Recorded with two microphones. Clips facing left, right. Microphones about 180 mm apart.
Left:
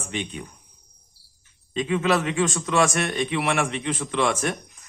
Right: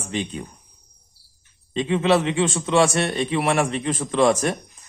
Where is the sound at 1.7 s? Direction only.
30° right (ahead or behind).